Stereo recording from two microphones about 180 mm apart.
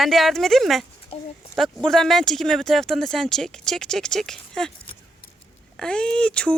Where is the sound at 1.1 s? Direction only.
35° left (ahead or behind).